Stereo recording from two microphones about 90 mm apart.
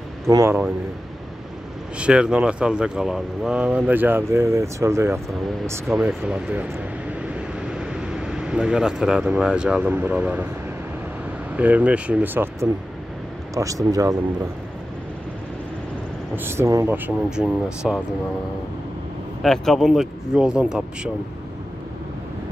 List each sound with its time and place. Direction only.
0.3 s speech: 35° right (ahead or behind)
2.0 s speech: 10° right (ahead or behind)
3.6 s speech: 15° right (ahead or behind)
6.0 s speech: 15° right (ahead or behind)
11.5 s speech: 15° right (ahead or behind)
13.6 s speech: 40° right (ahead or behind)
16.3 s speech: 30° right (ahead or behind)
17.4 s speech: 5° right (ahead or behind)
19.4 s speech: 5° left (ahead or behind)